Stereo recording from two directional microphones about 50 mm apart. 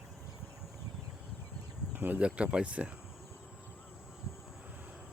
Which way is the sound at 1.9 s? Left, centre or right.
Right.